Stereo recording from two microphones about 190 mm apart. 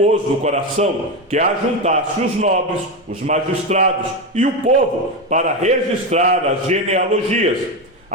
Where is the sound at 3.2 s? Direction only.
35° right (ahead or behind).